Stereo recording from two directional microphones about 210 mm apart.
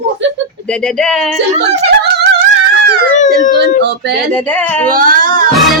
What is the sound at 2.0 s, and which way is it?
Music, 50° right (ahead or behind).